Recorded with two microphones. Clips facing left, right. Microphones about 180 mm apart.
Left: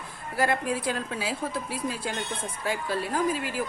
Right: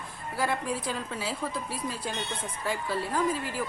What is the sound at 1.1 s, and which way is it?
A woman's voice, 10° left (ahead or behind).